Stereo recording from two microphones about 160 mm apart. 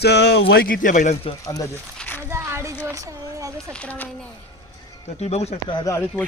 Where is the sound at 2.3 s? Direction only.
15° right (ahead or behind).